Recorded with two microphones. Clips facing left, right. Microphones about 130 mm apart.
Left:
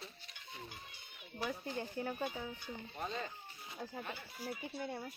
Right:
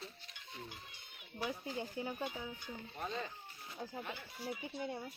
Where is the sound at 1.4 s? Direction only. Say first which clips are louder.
Even; 15° right (ahead or behind).